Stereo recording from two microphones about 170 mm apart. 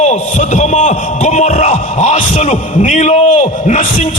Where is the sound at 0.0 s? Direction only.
45° left (ahead or behind).